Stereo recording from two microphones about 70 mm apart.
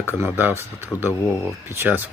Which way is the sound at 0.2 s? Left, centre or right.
Right.